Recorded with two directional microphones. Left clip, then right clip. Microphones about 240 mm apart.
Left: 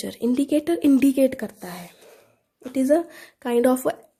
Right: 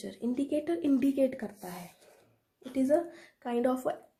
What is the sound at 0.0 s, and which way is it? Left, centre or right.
A woman's voice, left.